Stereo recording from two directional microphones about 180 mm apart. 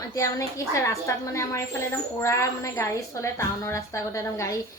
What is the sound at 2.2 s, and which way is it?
A woman's voice, 15° left (ahead or behind).